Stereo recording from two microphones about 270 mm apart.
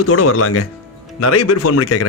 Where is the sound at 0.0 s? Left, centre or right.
Left.